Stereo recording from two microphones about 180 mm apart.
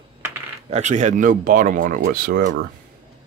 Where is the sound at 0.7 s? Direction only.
40° right (ahead or behind).